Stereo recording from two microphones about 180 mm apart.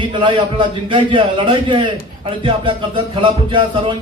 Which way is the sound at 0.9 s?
30° right (ahead or behind).